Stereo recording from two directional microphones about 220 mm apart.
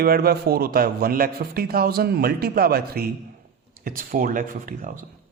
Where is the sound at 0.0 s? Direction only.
45° right (ahead or behind).